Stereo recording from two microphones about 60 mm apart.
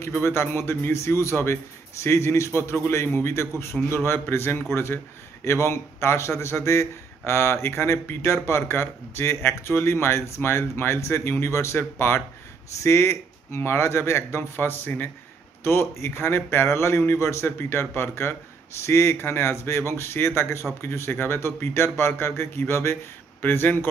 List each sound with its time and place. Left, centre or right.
0.2 s a man's voice: left